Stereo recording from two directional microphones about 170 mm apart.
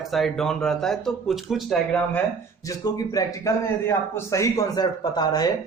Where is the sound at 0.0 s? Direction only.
Centre (ahead or behind).